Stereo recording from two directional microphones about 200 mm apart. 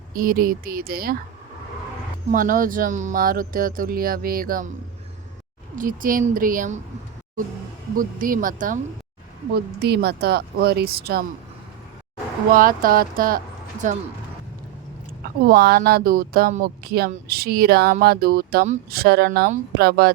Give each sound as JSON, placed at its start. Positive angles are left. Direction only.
{"t": 0.1, "sound": "speech", "side_deg": -45}
{"t": 2.3, "sound": "speech", "side_deg": -45}
{"t": 5.7, "sound": "speech", "side_deg": -45}
{"t": 7.9, "sound": "speech", "side_deg": -45}
{"t": 9.8, "sound": "speech", "side_deg": -55}
{"t": 12.5, "sound": "speech", "side_deg": -45}
{"t": 15.2, "sound": "speech", "side_deg": -50}